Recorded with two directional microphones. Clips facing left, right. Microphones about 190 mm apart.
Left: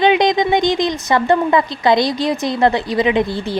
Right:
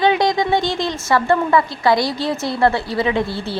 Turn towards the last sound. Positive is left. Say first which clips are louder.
# left 3 dB
turn(degrees=15)  # may be behind; listen again after turning